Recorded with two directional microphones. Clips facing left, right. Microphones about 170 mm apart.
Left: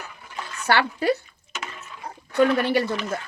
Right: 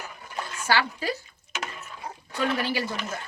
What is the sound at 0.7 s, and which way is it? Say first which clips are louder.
Speech: left 5 dB; 55° left (ahead or behind).